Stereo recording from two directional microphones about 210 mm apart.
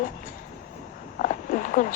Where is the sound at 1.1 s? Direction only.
40° left (ahead or behind).